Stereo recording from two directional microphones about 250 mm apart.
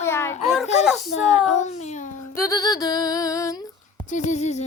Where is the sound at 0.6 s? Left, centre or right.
Left.